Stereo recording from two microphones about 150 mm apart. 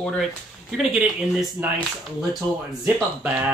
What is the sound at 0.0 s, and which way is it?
Speech, centre (ahead or behind).